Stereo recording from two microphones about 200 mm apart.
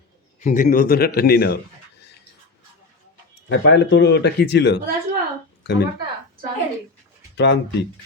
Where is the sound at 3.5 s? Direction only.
60° left (ahead or behind).